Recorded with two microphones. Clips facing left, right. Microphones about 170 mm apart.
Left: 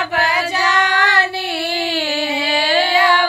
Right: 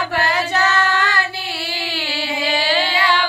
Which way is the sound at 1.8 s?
50° left (ahead or behind).